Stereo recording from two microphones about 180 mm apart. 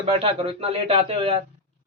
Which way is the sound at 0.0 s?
35° right (ahead or behind).